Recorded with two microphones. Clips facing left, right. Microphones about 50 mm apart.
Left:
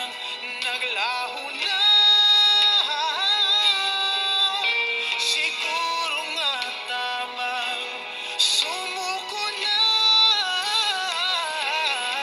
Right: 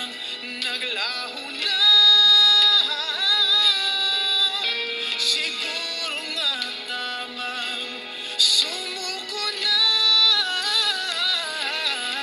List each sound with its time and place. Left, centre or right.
0.7 s music: left
8.4 s music: left